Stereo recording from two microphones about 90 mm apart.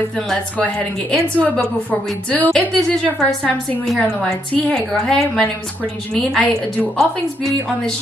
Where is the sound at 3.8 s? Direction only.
5° left (ahead or behind).